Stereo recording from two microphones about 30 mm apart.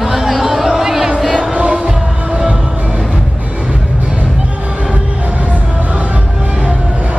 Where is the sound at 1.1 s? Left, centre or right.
Centre.